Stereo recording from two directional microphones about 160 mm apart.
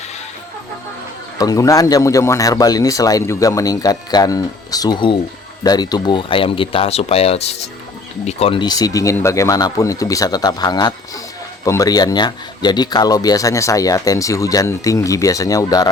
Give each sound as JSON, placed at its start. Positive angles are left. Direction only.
{"t": 1.4, "sound": "speech", "side_deg": 20}